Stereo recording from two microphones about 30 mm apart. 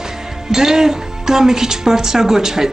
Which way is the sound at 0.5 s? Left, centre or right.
Centre.